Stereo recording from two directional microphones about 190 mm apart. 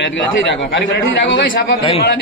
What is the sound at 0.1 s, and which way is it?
Speech, 70° left (ahead or behind).